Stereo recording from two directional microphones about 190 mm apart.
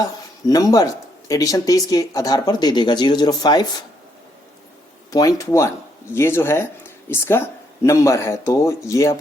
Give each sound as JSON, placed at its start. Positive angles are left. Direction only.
{"t": 0.0, "sound": "speech", "side_deg": 20}
{"t": 5.1, "sound": "a man's voice", "side_deg": 15}